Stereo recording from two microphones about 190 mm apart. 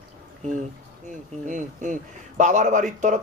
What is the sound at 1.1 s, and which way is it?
A man's voice, 40° right (ahead or behind).